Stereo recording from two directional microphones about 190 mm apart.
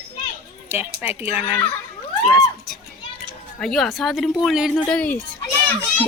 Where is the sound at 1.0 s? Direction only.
10° right (ahead or behind).